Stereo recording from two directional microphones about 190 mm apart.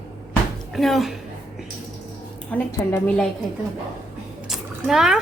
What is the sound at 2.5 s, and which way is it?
Speech, 10° left (ahead or behind).